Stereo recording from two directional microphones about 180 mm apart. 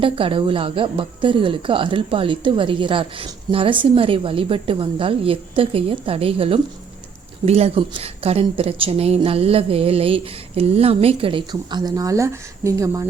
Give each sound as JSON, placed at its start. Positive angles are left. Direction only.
{"t": 0.0, "sound": "a woman's voice", "side_deg": -30}